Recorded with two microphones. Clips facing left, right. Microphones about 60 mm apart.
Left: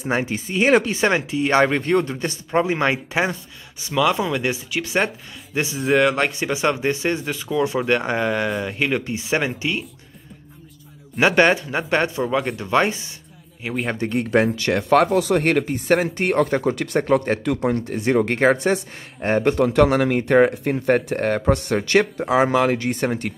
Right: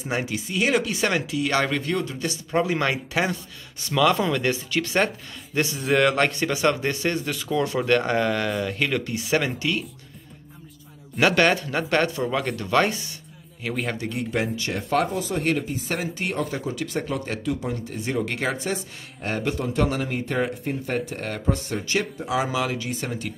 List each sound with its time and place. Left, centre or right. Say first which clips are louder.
0.0 s speech: left 4 dB; left
3.8 s speech: left 1 dB; centre
5.8 s speech: left 3 dB; centre
11.1 s speech: left 3 dB; left
12.3 s speech: left 3 dB; centre
12.5 s speech: left 2 dB; left
13.9 s speech: left 7 dB; left
19.2 s speech: left 8 dB; left
19.5 s speech: left 8 dB; left
21.5 s speech: left 7 dB; left
22.2 s speech: left 7 dB; left